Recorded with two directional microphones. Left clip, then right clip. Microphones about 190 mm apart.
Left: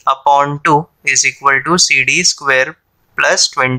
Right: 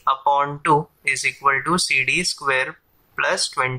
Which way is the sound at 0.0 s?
35° left (ahead or behind).